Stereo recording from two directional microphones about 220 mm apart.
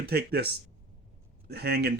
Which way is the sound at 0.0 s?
45° right (ahead or behind).